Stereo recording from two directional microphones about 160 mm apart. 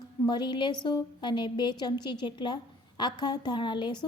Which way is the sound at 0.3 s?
25° left (ahead or behind).